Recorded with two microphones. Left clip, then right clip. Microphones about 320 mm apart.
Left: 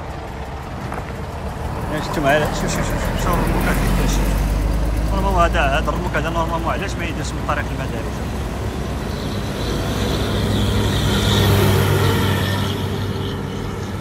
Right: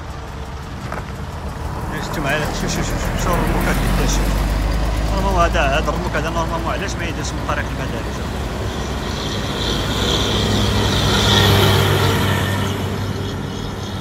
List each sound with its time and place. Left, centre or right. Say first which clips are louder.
2.0 s speech: left 4 dB; centre
9.3 s vehicle: right 4 dB; centre
10.4 s vehicle: right 3 dB; centre
11.8 s vehicle: right 2 dB; centre